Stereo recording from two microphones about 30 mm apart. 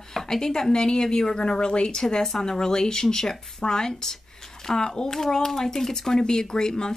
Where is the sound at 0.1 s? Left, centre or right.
Centre.